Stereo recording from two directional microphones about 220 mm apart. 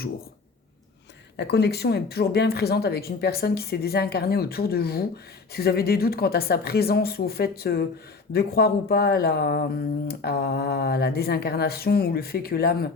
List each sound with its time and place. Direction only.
1.4 s speech: 50° left (ahead or behind)